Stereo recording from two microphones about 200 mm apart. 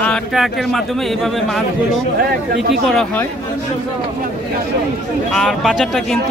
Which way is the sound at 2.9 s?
5° left (ahead or behind).